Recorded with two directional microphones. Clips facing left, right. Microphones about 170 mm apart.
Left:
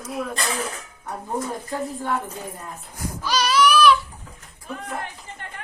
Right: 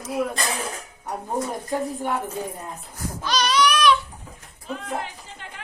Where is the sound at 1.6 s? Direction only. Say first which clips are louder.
Right 1 dB; 15° right (ahead or behind).